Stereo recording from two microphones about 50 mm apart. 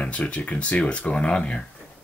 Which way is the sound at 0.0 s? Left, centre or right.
Left.